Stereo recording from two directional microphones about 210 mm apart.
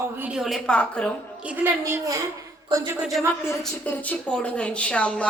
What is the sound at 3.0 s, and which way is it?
A woman's voice, centre (ahead or behind).